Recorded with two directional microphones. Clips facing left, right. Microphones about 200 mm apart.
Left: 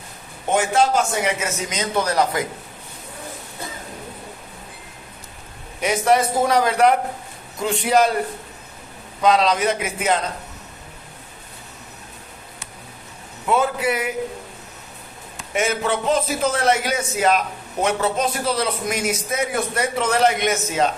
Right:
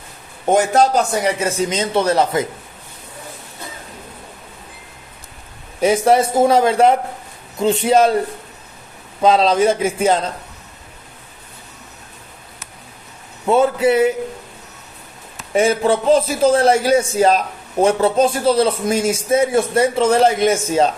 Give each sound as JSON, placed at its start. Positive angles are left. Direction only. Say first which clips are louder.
{"t": 0.5, "sound": "a man's voice", "louder": "right 4 dB", "side_deg": -40}
{"t": 5.8, "sound": "a man's voice", "louder": "right 5 dB", "side_deg": -30}
{"t": 9.2, "sound": "a man's voice", "louder": "right 4 dB", "side_deg": -30}
{"t": 13.5, "sound": "a man's voice", "louder": "right 6 dB", "side_deg": -30}
{"t": 15.5, "sound": "a man's voice", "louder": "right 7 dB", "side_deg": -30}